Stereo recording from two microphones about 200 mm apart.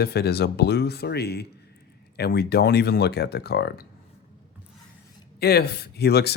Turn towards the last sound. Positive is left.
turn(degrees=55)  # may be behind; listen again after turning